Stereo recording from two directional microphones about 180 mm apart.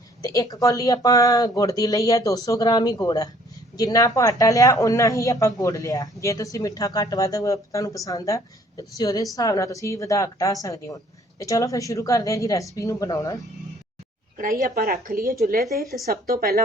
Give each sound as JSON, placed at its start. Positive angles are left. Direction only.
{"t": 0.2, "sound": "a woman's voice", "side_deg": 20}
{"t": 14.3, "sound": "speech", "side_deg": -50}